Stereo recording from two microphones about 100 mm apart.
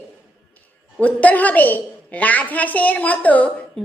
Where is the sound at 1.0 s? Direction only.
15° left (ahead or behind).